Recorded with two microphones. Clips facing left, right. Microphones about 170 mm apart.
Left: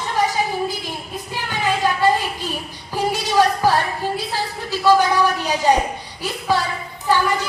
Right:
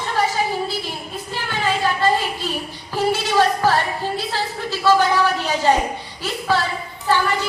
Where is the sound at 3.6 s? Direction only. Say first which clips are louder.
Left 1 dB; 15° left (ahead or behind).